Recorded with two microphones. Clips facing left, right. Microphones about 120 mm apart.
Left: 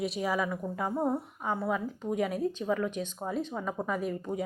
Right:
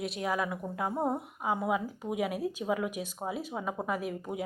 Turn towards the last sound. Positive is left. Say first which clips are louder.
# left 2 dB
turn(degrees=-5)  # may be behind; listen again after turning